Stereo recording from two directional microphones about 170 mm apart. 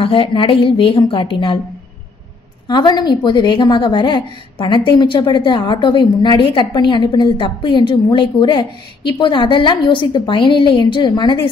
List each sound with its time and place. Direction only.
0.0 s a woman's voice: 30° left (ahead or behind)
2.7 s a woman's voice: 25° left (ahead or behind)